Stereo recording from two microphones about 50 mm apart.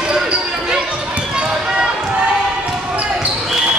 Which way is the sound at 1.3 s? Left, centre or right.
Centre.